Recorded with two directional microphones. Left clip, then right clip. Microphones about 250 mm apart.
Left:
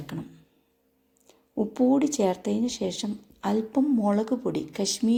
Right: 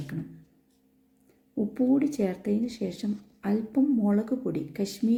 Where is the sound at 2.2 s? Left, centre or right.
Left.